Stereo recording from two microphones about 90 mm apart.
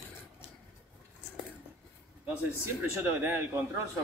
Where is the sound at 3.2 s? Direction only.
20° right (ahead or behind).